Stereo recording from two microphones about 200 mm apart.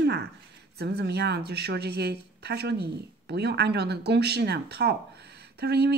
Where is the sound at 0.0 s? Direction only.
55° right (ahead or behind).